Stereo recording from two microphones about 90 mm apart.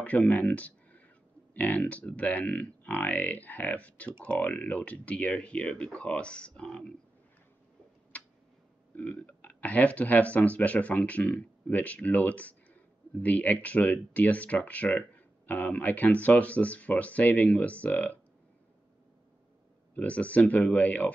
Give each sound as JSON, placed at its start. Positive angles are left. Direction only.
{"t": 0.0, "sound": "speech", "side_deg": 15}
{"t": 8.1, "sound": "tick", "side_deg": 15}
{"t": 8.9, "sound": "speech", "side_deg": 15}
{"t": 19.9, "sound": "speech", "side_deg": 15}